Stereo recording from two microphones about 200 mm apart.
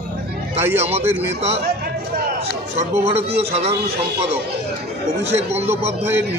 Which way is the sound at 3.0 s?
30° right (ahead or behind).